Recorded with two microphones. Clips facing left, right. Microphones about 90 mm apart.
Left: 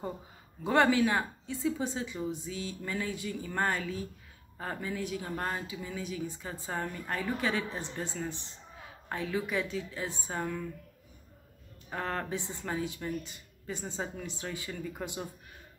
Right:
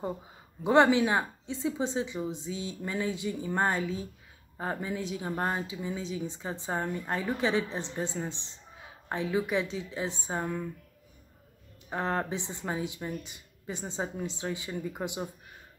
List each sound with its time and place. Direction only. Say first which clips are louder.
0.7 s speech: right 3 dB; 20° right (ahead or behind)
11.9 s speech: right 4 dB; 20° right (ahead or behind)